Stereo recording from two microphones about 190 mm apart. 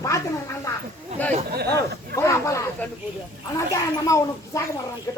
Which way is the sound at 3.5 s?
15° left (ahead or behind).